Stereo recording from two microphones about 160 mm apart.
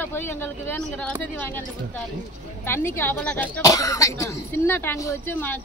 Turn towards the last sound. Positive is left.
turn(degrees=10)  # may be behind; listen again after turning